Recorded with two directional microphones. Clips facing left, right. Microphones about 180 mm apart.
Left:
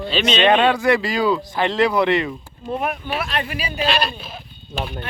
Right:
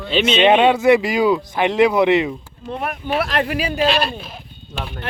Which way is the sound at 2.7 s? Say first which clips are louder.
Left 2 dB; 5° left (ahead or behind).